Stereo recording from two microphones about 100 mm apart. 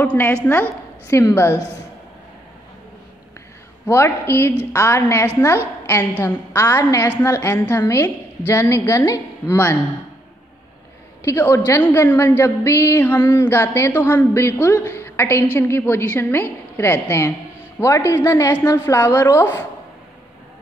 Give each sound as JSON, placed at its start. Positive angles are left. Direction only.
{"t": 0.0, "sound": "a woman's voice", "side_deg": 20}
{"t": 3.8, "sound": "a woman's voice", "side_deg": 25}
{"t": 11.2, "sound": "a woman's voice", "side_deg": 30}